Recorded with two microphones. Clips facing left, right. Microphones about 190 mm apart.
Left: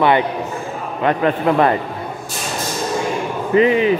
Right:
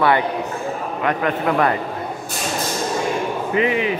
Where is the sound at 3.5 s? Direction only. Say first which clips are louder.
Left 7 dB; 35° left (ahead or behind).